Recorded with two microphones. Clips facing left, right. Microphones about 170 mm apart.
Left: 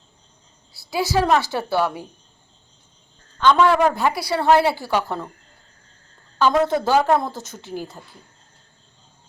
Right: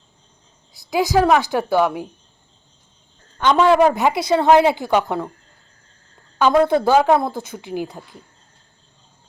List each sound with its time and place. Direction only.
0.7 s a woman's voice: 15° right (ahead or behind)
3.4 s a woman's voice: 15° right (ahead or behind)
6.4 s a woman's voice: 10° right (ahead or behind)